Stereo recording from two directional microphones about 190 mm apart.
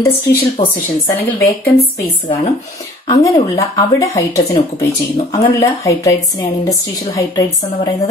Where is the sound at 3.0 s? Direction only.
25° left (ahead or behind).